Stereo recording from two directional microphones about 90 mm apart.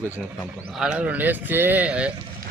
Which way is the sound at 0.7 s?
10° right (ahead or behind).